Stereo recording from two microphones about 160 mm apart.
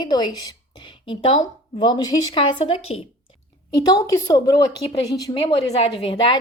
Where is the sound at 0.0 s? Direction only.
25° left (ahead or behind).